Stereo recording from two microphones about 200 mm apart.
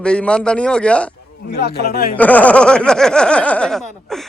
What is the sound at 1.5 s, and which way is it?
Speech, 55° left (ahead or behind).